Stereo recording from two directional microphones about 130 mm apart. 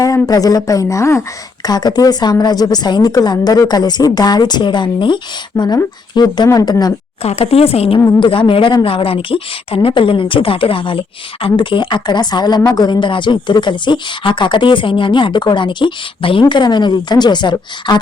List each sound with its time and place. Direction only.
0.0 s speech: 25° left (ahead or behind)
7.2 s speech: 50° left (ahead or behind)
7.9 s speech: 25° left (ahead or behind)
8.2 s speech: 40° left (ahead or behind)